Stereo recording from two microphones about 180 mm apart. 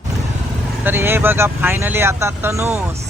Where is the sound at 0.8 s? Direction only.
10° right (ahead or behind).